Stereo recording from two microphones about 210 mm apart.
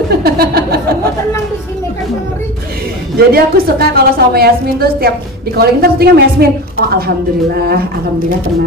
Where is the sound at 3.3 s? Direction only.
45° right (ahead or behind).